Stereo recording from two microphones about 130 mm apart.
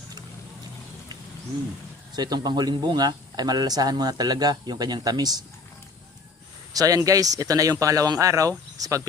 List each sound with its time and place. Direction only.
2.1 s a man's voice: 30° right (ahead or behind)
6.7 s speech: 25° right (ahead or behind)